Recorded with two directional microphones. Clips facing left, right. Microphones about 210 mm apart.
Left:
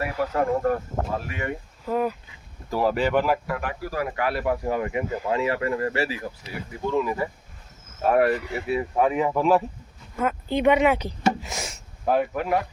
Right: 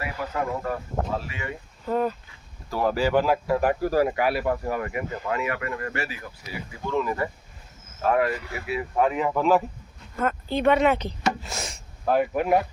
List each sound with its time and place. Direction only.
0.3 s speech: 50° left (ahead or behind)
1.8 s speech: 5° left (ahead or behind)
2.9 s speech: 5° right (ahead or behind)
3.6 s speech: 45° right (ahead or behind)
4.1 s speech: 10° right (ahead or behind)
4.4 s speech: 15° left (ahead or behind); by 6.5 s 30° left (ahead or behind)
6.9 s speech: 5° left (ahead or behind)
8.1 s speech: 40° left (ahead or behind)
8.4 s speech: 30° left (ahead or behind)
9.0 s speech: 10° left (ahead or behind)
11.7 s a sound: 5° left (ahead or behind)
12.2 s speech: 20° right (ahead or behind)